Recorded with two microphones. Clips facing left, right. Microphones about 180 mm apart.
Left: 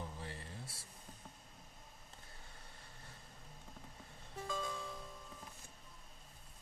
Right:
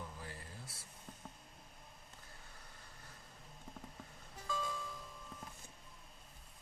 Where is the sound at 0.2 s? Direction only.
25° left (ahead or behind).